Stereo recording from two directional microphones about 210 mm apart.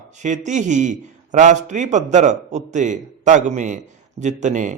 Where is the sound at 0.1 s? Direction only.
35° right (ahead or behind).